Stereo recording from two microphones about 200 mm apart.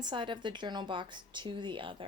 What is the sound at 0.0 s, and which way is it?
Speech, 25° right (ahead or behind).